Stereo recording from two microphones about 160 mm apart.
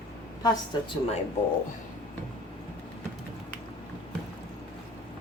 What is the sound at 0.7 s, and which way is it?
Speech, 25° left (ahead or behind).